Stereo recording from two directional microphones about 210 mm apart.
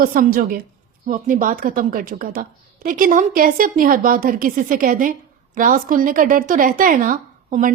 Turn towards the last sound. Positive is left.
turn(degrees=-40)  # may be behind; listen again after turning